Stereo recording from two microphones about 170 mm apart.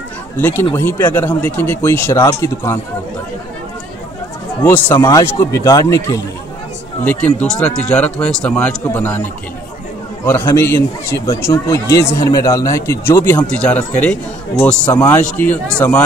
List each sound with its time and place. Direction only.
0.4 s a man's voice: 10° left (ahead or behind)
4.6 s a man's voice: 10° left (ahead or behind)